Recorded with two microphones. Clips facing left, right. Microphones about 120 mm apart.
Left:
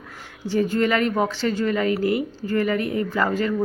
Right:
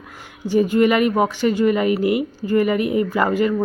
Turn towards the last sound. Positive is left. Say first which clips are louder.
# right 3 dB
turn(degrees=-15)  # may be behind; listen again after turning